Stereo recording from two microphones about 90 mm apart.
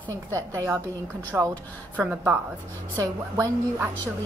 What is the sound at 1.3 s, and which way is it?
Speech, 20° right (ahead or behind).